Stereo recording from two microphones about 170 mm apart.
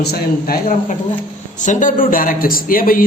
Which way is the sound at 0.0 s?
65° left (ahead or behind).